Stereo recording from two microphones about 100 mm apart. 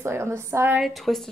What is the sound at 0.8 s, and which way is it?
Speech, centre (ahead or behind).